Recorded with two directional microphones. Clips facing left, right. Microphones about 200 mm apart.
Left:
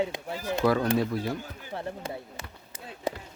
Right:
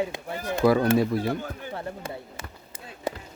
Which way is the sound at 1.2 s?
60° right (ahead or behind).